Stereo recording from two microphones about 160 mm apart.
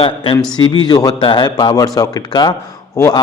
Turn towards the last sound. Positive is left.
turn(degrees=20)  # may be behind; listen again after turning